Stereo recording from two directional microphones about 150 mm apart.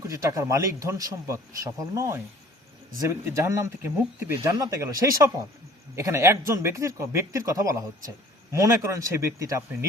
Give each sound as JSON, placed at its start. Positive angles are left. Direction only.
{"t": 0.0, "sound": "speech", "side_deg": -20}